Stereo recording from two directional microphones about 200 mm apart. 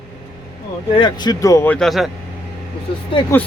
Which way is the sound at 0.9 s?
20° left (ahead or behind).